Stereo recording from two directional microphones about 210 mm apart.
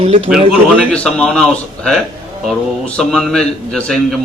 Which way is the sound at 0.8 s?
5° left (ahead or behind).